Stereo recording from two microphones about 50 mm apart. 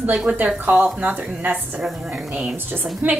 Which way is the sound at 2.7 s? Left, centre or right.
Right.